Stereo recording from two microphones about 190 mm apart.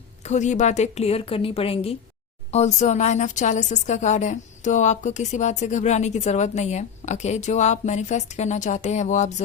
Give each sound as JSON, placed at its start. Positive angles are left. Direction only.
{"t": 0.3, "sound": "a woman's voice", "side_deg": 40}